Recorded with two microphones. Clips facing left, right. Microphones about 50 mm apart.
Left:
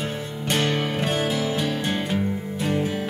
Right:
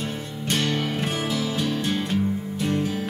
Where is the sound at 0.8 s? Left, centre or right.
Centre.